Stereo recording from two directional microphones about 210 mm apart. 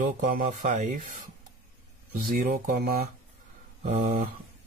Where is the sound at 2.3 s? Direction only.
40° right (ahead or behind).